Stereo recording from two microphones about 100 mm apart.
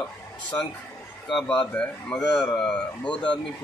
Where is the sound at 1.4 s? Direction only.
5° left (ahead or behind).